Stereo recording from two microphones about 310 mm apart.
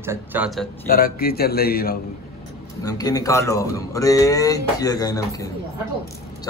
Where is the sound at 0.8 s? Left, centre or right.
Left.